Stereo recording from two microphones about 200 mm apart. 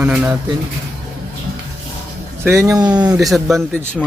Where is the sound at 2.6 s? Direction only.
20° right (ahead or behind).